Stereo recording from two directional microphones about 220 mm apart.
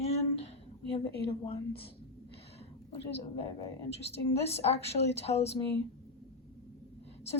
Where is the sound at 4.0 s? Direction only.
30° left (ahead or behind).